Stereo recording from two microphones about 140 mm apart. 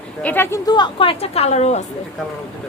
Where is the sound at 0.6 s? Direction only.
30° left (ahead or behind); by 1.8 s 50° left (ahead or behind).